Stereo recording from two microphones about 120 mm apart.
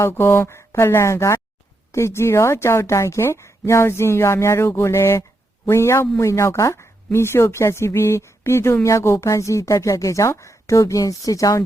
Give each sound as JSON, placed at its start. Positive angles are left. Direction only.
{"t": 0.0, "sound": "speech", "side_deg": 20}